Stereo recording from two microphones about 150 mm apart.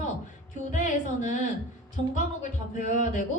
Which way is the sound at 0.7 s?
55° left (ahead or behind).